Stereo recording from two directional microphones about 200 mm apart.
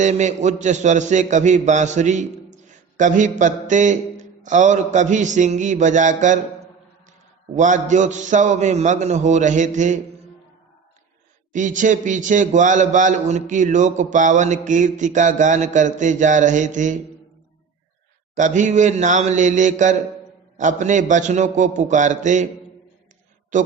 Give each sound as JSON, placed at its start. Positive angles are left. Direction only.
{"t": 0.0, "sound": "a man's voice", "side_deg": -35}
{"t": 7.5, "sound": "a man's voice", "side_deg": -40}
{"t": 11.5, "sound": "a man's voice", "side_deg": -40}
{"t": 18.3, "sound": "a man's voice", "side_deg": -40}
{"t": 23.5, "sound": "a man's voice", "side_deg": -40}